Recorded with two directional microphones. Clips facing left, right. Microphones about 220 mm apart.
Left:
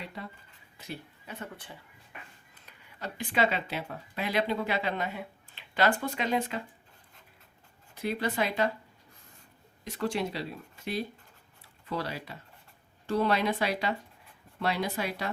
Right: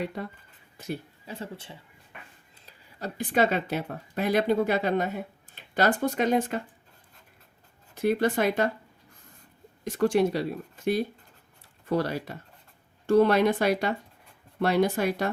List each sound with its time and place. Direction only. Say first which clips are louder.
0.0 s speech: right 9 dB; 50° right (ahead or behind)
1.3 s speech: right 4 dB; 25° right (ahead or behind); by 6.6 s 45° right (ahead or behind)
7.9 s speech: right 6 dB; 50° right (ahead or behind)
9.8 s speech: right 9 dB; 50° right (ahead or behind)